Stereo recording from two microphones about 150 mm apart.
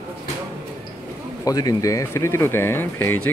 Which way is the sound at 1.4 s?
25° left (ahead or behind).